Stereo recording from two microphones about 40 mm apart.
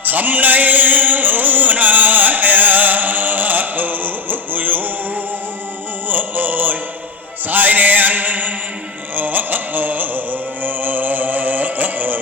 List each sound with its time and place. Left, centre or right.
0.0 s music: right
6.1 s music: right